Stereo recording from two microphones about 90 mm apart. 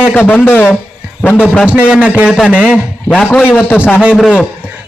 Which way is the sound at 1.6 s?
15° right (ahead or behind).